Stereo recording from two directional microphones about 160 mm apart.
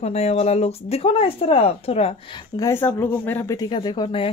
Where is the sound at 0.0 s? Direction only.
40° left (ahead or behind); by 3.5 s 10° left (ahead or behind).